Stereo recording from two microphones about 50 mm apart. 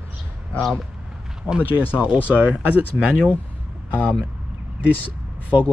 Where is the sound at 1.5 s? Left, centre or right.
Right.